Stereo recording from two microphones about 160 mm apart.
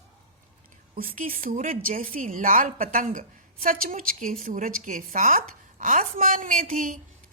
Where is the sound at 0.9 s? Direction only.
60° right (ahead or behind).